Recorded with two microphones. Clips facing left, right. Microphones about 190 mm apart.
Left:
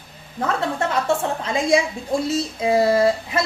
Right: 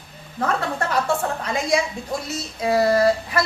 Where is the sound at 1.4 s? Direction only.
25° left (ahead or behind).